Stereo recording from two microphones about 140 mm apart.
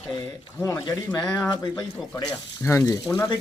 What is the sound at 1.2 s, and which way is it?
Speech, 10° left (ahead or behind).